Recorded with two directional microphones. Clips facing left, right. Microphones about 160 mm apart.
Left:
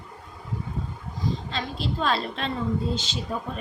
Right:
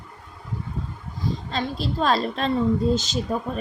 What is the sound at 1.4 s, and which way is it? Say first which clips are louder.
A woman's voice: right 3 dB; 40° right (ahead or behind).